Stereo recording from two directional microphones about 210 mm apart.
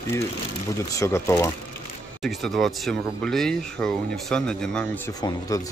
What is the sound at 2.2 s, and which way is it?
Speech, centre (ahead or behind).